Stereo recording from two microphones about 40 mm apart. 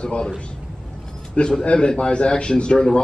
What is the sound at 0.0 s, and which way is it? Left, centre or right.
Speech, left.